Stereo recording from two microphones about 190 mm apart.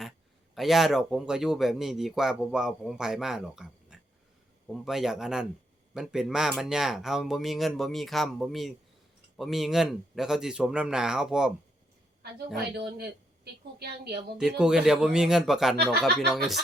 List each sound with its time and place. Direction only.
0.5 s speech: centre (ahead or behind)
12.5 s a woman's voice: 55° right (ahead or behind)
14.3 s speech: 5° right (ahead or behind)